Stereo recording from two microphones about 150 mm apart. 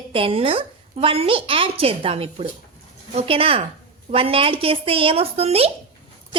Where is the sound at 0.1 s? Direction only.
40° right (ahead or behind).